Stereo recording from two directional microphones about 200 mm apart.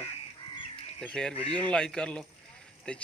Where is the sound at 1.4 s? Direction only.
25° right (ahead or behind).